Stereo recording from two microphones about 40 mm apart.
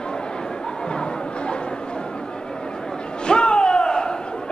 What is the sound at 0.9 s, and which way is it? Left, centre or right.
Music, left.